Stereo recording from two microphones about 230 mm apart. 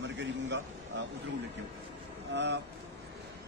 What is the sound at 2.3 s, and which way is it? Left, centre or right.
Speech, right.